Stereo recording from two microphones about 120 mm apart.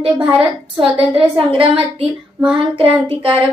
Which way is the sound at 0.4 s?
50° right (ahead or behind).